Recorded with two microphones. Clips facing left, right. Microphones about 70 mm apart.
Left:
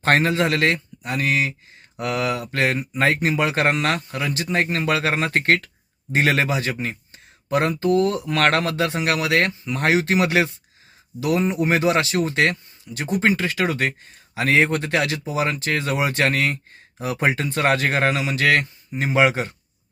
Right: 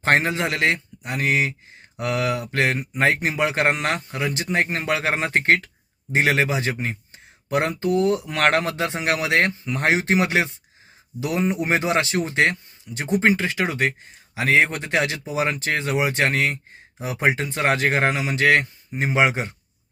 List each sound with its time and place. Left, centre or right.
0.0 s speech: right